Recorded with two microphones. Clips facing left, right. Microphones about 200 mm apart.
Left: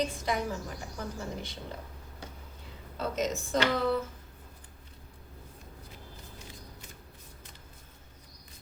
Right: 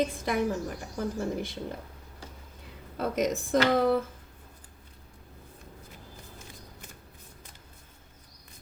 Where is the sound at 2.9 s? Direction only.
55° right (ahead or behind).